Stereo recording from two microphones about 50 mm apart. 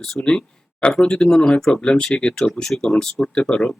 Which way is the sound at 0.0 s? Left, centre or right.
Centre.